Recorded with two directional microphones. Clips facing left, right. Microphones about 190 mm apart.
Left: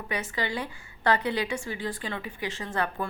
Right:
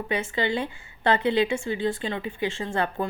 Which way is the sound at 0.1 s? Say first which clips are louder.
Right 5 dB; 25° right (ahead or behind).